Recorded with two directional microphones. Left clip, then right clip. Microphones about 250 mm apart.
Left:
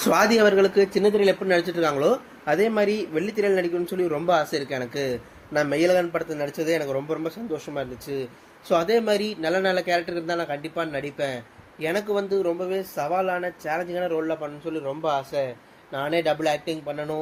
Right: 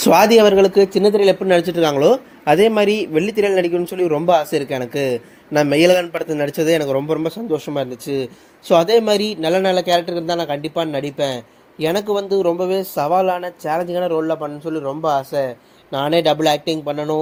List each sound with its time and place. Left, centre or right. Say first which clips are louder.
0.0 s a man's voice: right 8 dB; right